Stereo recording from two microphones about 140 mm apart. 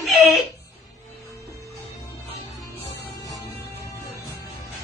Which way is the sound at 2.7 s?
25° left (ahead or behind).